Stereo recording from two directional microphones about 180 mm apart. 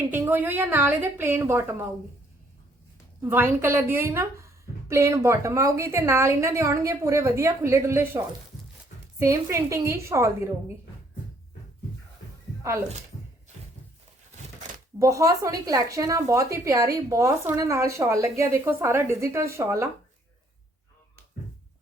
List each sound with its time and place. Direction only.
0.1 s speech: 10° right (ahead or behind)
3.2 s speech: 10° right (ahead or behind)
14.9 s speech: 15° right (ahead or behind)